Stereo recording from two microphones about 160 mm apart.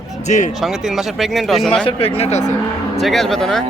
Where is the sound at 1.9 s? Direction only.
35° left (ahead or behind).